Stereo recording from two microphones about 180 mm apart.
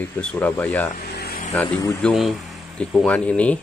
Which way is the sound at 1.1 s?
65° left (ahead or behind).